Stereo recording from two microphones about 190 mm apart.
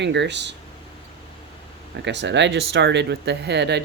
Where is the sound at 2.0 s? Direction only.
70° right (ahead or behind).